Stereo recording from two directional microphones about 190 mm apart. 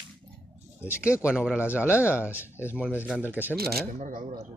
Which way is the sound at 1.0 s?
5° right (ahead or behind).